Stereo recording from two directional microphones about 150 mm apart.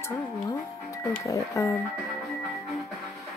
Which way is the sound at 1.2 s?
20° left (ahead or behind).